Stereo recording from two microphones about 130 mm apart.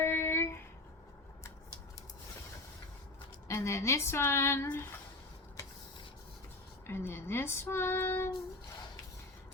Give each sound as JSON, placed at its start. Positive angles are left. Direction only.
{"t": 0.0, "sound": "a sound", "side_deg": 20}
{"t": 3.5, "sound": "speech", "side_deg": 20}
{"t": 6.8, "sound": "child singing", "side_deg": 20}